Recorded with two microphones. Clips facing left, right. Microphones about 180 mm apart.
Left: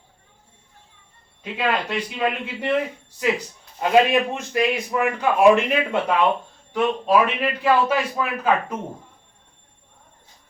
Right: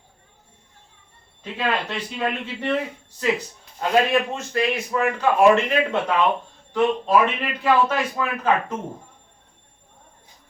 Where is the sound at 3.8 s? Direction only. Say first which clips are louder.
Left 2 dB; 15° left (ahead or behind).